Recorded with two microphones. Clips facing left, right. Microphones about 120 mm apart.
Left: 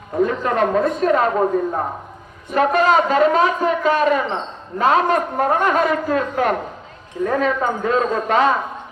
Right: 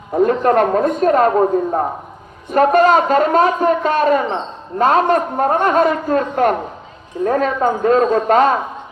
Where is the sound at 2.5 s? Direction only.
45° right (ahead or behind); by 5.8 s 30° right (ahead or behind).